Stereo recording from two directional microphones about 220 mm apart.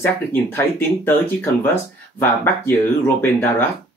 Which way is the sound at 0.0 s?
10° left (ahead or behind).